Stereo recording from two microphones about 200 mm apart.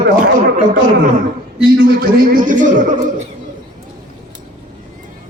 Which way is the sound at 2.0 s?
45° right (ahead or behind).